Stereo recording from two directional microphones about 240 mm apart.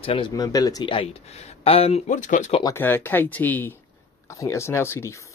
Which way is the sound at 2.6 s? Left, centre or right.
Centre.